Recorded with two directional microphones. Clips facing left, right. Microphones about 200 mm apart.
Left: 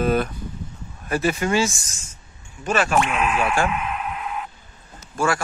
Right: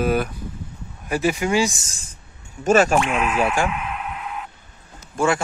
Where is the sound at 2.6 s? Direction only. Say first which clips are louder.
Right 4 dB; 45° right (ahead or behind).